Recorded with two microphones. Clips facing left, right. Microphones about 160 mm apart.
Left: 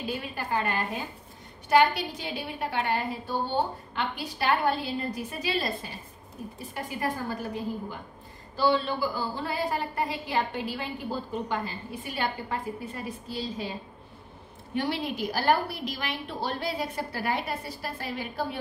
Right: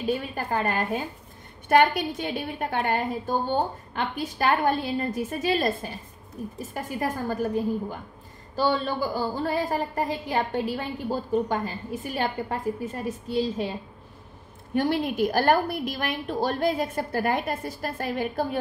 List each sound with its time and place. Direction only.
0.0 s a woman's voice: 45° right (ahead or behind)
1.7 s a woman's voice: 55° right (ahead or behind)
14.7 s a woman's voice: 45° right (ahead or behind)